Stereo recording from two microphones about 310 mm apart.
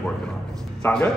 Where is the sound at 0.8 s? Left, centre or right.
Centre.